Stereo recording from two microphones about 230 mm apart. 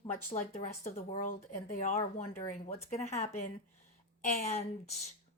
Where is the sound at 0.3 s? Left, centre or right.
Left.